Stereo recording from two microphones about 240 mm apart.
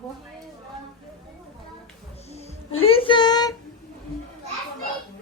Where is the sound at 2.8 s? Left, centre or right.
Left.